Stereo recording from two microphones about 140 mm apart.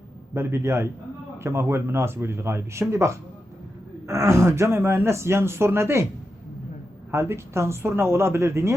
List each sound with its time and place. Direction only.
0.3 s speech: 20° right (ahead or behind)
7.1 s speech: 20° right (ahead or behind)